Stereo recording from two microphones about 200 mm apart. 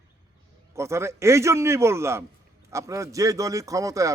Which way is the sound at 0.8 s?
15° right (ahead or behind).